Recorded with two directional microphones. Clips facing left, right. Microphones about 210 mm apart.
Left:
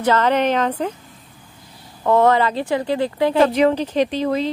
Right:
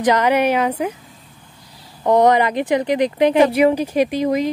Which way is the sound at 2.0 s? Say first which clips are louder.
Right 1 dB; 15° right (ahead or behind).